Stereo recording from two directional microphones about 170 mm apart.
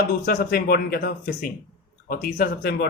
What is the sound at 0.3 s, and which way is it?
Speech, 60° left (ahead or behind).